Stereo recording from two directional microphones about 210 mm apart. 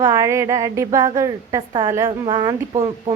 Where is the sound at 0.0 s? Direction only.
15° right (ahead or behind).